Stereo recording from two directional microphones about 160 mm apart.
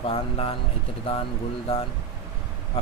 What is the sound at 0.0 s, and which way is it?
Speech, 35° left (ahead or behind).